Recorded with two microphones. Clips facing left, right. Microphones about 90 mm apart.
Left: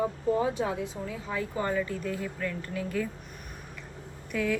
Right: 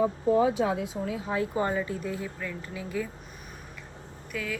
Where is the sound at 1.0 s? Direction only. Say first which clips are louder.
Right 4 dB; 30° right (ahead or behind); by 3.1 s 5° right (ahead or behind).